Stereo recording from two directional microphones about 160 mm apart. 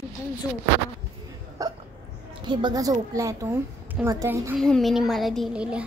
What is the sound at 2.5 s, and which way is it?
A woman's voice, 30° right (ahead or behind).